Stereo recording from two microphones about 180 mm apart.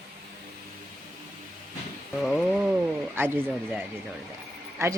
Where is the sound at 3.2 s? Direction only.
10° right (ahead or behind).